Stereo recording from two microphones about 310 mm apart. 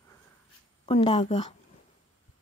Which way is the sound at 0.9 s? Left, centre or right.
Centre.